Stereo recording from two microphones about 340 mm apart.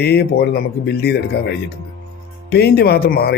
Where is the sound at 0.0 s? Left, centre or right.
Left.